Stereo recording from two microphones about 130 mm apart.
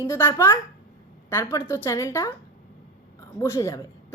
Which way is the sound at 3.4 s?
25° left (ahead or behind).